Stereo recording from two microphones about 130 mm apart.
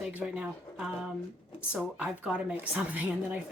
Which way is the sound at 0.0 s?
10° right (ahead or behind).